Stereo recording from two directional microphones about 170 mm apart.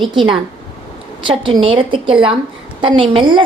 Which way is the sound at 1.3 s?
30° right (ahead or behind).